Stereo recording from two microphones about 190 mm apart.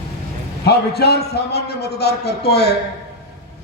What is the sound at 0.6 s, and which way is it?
A man's voice, 60° left (ahead or behind).